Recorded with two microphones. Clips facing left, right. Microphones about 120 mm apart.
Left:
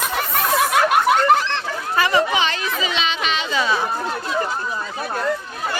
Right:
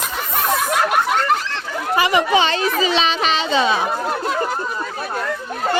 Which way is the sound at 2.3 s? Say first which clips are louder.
Right 5 dB; 30° right (ahead or behind).